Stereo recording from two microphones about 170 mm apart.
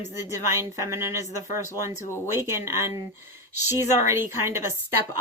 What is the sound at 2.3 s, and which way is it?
Speech, 15° right (ahead or behind).